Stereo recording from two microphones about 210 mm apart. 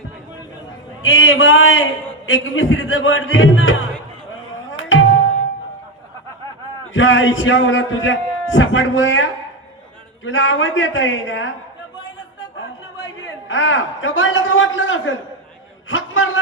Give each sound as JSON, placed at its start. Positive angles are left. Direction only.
{"t": 1.0, "sound": "speech", "side_deg": 70}
{"t": 4.8, "sound": "tabla", "side_deg": 70}
{"t": 6.9, "sound": "a man's voice", "side_deg": 65}
{"t": 13.5, "sound": "a man's voice", "side_deg": 65}
{"t": 15.9, "sound": "a sound", "side_deg": 65}